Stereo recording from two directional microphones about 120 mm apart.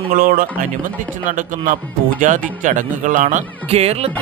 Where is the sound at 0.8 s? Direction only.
90° right.